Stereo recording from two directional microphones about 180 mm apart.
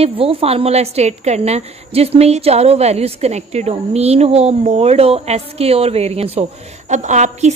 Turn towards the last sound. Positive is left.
turn(degrees=-40)  # may be behind; listen again after turning